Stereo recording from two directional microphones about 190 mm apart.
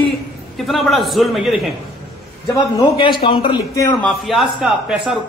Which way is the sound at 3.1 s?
25° left (ahead or behind).